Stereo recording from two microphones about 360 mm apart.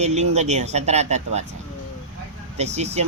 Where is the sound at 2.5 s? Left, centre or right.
Centre.